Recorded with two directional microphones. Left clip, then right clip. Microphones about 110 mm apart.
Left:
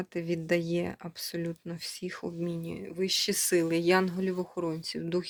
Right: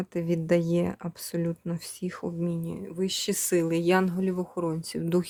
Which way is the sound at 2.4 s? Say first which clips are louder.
Right 2 dB; 25° right (ahead or behind).